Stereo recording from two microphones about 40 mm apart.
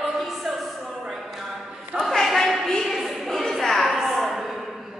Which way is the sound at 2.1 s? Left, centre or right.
Centre.